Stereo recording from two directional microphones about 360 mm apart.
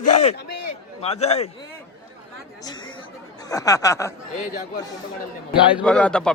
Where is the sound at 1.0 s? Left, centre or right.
Centre.